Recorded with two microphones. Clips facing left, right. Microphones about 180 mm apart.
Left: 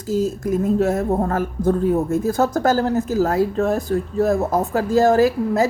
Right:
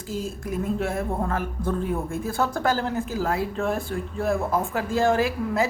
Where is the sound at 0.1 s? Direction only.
40° left (ahead or behind).